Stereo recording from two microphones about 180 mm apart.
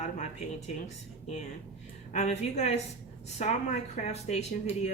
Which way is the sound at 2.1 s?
40° left (ahead or behind).